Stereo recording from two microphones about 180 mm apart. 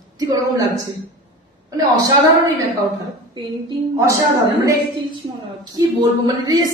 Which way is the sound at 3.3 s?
20° right (ahead or behind).